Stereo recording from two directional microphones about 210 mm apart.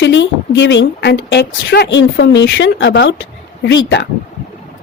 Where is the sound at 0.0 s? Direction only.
60° left (ahead or behind).